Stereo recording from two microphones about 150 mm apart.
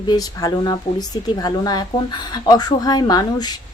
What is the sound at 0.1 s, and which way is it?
Speech, 25° left (ahead or behind).